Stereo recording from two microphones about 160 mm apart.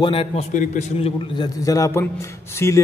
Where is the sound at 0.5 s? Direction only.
45° left (ahead or behind).